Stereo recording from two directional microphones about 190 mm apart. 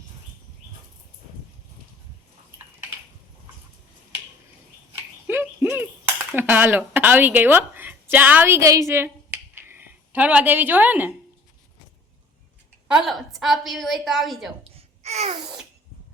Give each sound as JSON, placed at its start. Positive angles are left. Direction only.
{"t": 4.9, "sound": "a sound", "side_deg": -10}
{"t": 6.3, "sound": "a woman's voice", "side_deg": -10}
{"t": 12.9, "sound": "a woman's voice", "side_deg": 0}
{"t": 14.6, "sound": "babbling", "side_deg": -35}